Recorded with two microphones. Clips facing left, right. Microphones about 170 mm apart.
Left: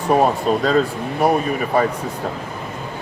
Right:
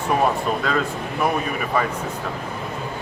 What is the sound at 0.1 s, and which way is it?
Speech, 40° left (ahead or behind).